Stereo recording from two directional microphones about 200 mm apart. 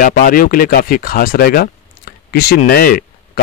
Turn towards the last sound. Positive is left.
turn(degrees=50)  # may be behind; listen again after turning